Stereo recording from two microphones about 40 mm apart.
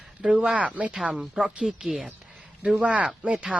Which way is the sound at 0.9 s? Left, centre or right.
Centre.